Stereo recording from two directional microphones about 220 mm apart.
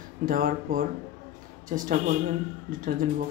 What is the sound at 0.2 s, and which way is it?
Speech, 40° right (ahead or behind).